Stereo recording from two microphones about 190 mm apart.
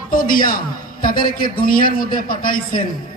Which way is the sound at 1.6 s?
50° left (ahead or behind).